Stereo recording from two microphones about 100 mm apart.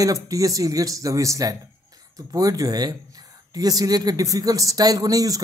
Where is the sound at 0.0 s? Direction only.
35° right (ahead or behind).